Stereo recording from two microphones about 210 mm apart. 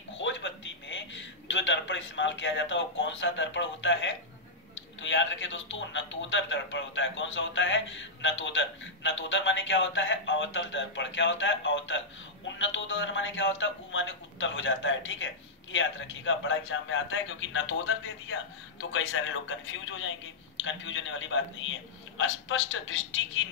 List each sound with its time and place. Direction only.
0.2 s a man's voice: 60° left (ahead or behind)